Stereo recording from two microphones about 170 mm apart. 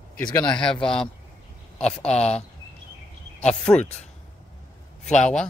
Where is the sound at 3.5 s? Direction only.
5° left (ahead or behind).